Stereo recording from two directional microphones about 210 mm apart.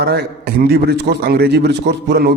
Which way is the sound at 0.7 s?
45° right (ahead or behind).